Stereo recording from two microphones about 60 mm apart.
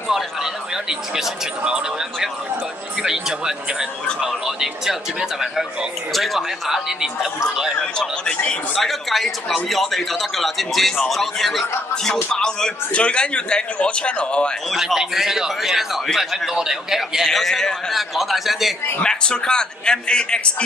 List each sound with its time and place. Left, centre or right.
0.1 s a sound: centre
3.0 s speech: centre
7.8 s a man's voice: centre
14.7 s speech: centre
15.0 s speech: centre
17.3 s speech: centre
18.1 s speech: centre
18.9 s a man's voice: centre